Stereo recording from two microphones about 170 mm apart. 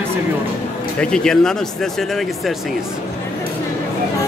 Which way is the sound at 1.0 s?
5° left (ahead or behind).